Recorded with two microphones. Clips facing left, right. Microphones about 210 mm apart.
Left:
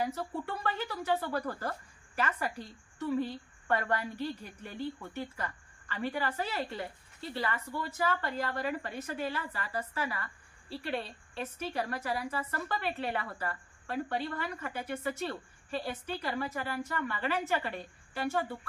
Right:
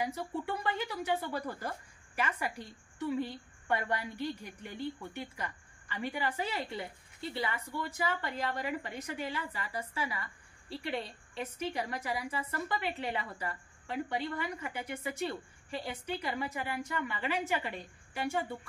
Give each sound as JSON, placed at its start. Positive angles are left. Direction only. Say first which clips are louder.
{"t": 0.0, "sound": "speech", "louder": "left 1 dB", "side_deg": -15}